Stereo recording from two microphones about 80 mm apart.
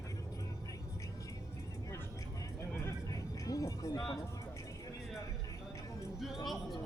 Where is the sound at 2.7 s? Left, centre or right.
Left.